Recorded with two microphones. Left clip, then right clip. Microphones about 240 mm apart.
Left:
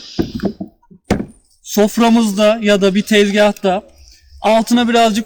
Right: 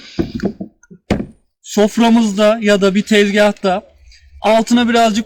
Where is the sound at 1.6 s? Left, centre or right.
Centre.